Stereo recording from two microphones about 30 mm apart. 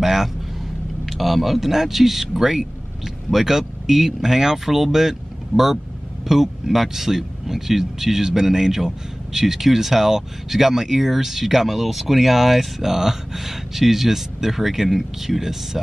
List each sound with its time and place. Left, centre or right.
0.0 s speech: centre
6.2 s speech: centre